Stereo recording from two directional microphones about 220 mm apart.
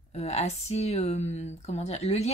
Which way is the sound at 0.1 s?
30° left (ahead or behind).